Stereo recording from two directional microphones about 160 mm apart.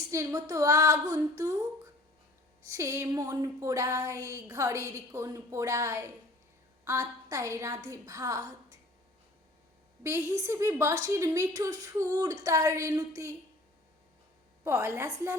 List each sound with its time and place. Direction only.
0.1 s speech: 20° right (ahead or behind)
10.0 s speech: 20° right (ahead or behind)
14.6 s a woman's voice: 15° right (ahead or behind)